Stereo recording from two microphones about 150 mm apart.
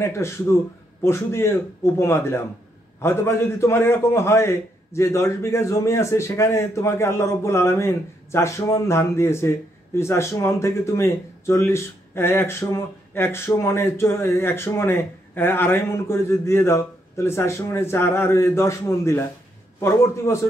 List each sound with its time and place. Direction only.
0.0 s a man's voice: 20° left (ahead or behind)
20.3 s a man's voice: 15° left (ahead or behind)